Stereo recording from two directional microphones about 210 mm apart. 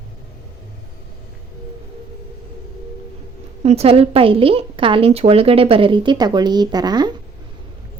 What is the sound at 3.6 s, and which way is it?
Speech, 30° right (ahead or behind).